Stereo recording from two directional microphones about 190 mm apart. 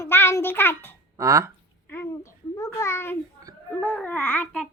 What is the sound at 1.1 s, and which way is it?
Speech, 15° right (ahead or behind).